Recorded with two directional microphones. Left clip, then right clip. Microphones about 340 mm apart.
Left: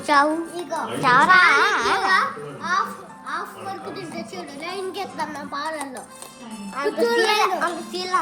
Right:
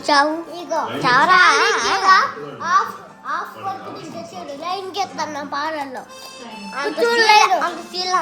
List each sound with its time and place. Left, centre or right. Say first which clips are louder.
0.0 s a child's voice: right 2 dB; centre
2.0 s a child's voice: right 6 dB; centre
4.6 s a child's voice: right 6 dB; centre
6.7 s a child's voice: right 3 dB; centre